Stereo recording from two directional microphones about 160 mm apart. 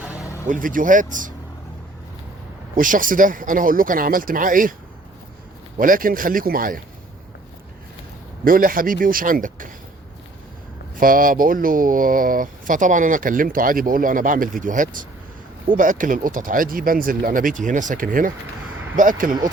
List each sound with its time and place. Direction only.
0.4 s speech: 55° right (ahead or behind)
2.7 s speech: 55° right (ahead or behind)
5.7 s speech: 60° right (ahead or behind)
8.4 s speech: 60° right (ahead or behind)
11.0 s speech: 60° right (ahead or behind)